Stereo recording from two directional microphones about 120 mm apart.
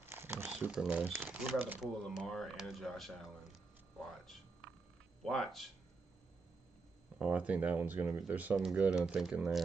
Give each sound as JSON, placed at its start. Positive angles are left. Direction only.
{"t": 0.0, "sound": "a sound", "side_deg": -20}
{"t": 0.5, "sound": "speech", "side_deg": -5}
{"t": 1.8, "sound": "speech", "side_deg": 0}
{"t": 7.2, "sound": "speech", "side_deg": -10}